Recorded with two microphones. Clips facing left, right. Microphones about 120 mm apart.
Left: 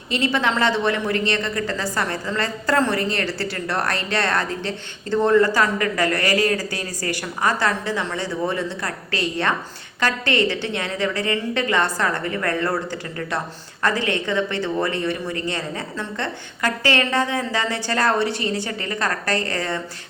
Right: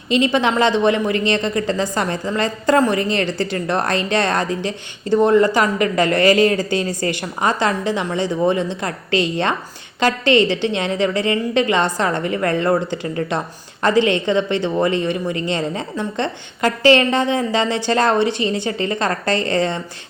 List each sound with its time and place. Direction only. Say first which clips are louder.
0.1 s a woman's voice: right 5 dB; 20° right (ahead or behind)